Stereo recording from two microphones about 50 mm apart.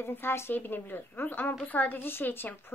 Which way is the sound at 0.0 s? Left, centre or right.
Left.